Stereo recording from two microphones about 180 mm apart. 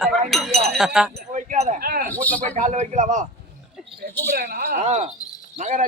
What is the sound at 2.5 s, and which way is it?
Speech, 45° right (ahead or behind).